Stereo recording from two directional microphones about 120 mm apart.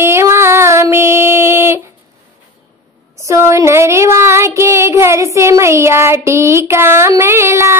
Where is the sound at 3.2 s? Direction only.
25° right (ahead or behind).